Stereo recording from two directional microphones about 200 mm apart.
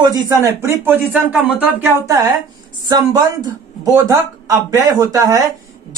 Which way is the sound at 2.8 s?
20° right (ahead or behind).